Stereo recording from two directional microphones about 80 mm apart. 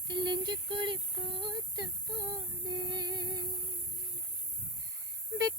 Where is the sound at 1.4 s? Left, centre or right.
Right.